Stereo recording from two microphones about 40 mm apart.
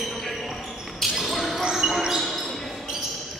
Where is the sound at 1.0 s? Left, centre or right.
Centre.